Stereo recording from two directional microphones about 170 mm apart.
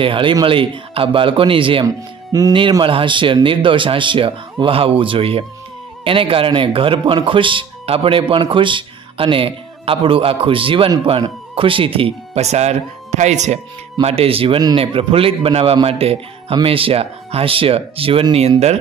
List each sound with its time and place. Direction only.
0.0 s a man's voice: 30° right (ahead or behind)
1.9 s speech: 20° right (ahead or behind)
2.5 s a man's voice: 30° right (ahead or behind)